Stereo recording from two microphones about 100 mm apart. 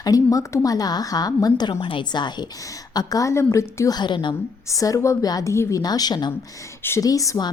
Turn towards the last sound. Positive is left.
turn(degrees=35)  # may be behind; listen again after turning